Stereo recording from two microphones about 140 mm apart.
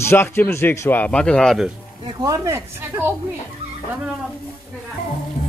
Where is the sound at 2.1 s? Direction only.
25° right (ahead or behind).